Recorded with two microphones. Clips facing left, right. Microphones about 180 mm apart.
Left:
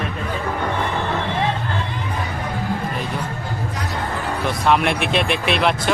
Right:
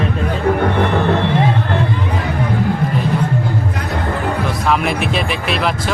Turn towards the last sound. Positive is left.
turn(degrees=0)  # may be behind; listen again after turning